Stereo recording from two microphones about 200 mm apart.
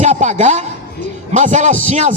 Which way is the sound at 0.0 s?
35° right (ahead or behind).